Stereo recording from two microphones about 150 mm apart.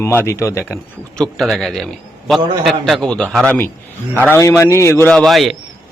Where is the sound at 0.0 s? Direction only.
15° left (ahead or behind).